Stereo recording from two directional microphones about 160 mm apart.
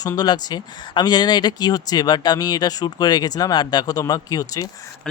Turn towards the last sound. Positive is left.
turn(degrees=20)  # may be behind; listen again after turning